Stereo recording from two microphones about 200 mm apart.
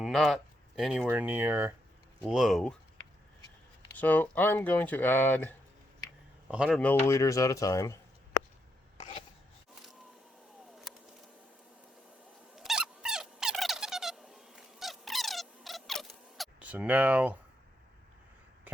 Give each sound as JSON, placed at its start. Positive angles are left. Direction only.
{"t": 0.0, "sound": "speech", "side_deg": 0}
{"t": 1.0, "sound": "speech", "side_deg": -10}
{"t": 2.2, "sound": "speech", "side_deg": 0}
{"t": 3.9, "sound": "speech", "side_deg": 10}
{"t": 6.5, "sound": "speech", "side_deg": -5}
{"t": 6.7, "sound": "speech", "side_deg": 10}
{"t": 12.5, "sound": "a sound", "side_deg": -5}